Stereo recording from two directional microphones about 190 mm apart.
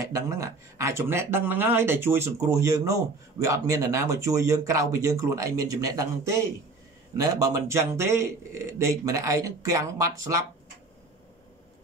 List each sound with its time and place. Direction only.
0.0 s speech: 20° right (ahead or behind)